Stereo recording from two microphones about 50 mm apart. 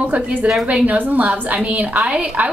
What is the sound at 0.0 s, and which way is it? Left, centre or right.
A woman's voice, right.